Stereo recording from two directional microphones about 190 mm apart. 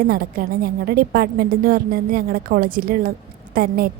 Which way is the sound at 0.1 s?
50° right (ahead or behind).